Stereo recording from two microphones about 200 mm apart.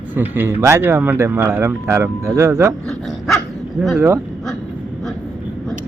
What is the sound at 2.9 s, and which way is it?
Dog, centre (ahead or behind).